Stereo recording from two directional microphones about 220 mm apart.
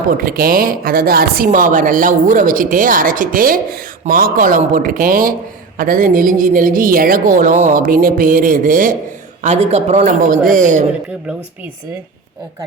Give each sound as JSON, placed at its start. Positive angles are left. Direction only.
{"t": 0.2, "sound": "speech", "side_deg": -40}